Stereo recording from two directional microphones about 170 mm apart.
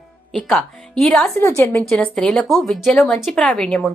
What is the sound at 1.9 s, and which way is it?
A woman's voice, 5° left (ahead or behind).